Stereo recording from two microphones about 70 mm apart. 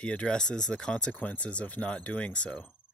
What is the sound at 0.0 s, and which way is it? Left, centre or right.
Speech, centre.